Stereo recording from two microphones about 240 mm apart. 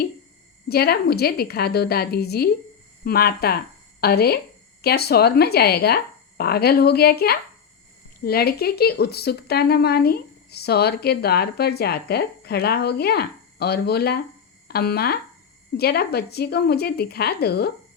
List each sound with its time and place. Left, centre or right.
0.7 s speech: left